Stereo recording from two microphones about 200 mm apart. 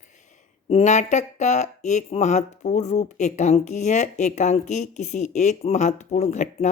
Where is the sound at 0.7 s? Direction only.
35° left (ahead or behind).